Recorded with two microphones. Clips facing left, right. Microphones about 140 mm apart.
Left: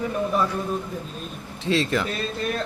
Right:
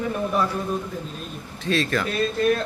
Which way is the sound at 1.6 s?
20° left (ahead or behind).